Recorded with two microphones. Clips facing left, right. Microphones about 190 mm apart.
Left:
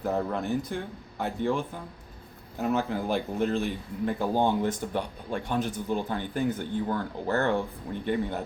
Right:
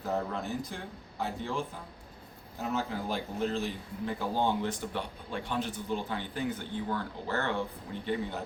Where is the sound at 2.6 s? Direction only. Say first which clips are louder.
Left 6 dB; 60° left (ahead or behind).